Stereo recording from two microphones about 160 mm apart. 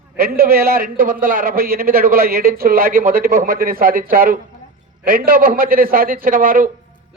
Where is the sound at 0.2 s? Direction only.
70° right (ahead or behind).